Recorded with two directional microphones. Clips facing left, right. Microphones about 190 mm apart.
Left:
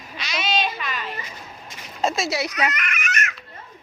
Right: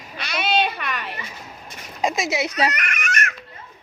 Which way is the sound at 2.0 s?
15° right (ahead or behind).